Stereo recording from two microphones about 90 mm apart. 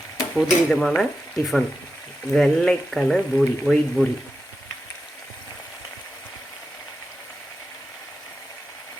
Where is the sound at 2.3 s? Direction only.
5° left (ahead or behind).